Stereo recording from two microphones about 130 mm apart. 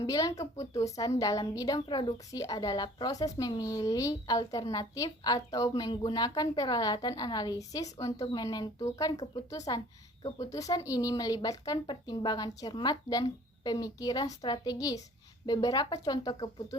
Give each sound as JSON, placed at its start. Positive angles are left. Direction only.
{"t": 0.0, "sound": "a woman's voice", "side_deg": 25}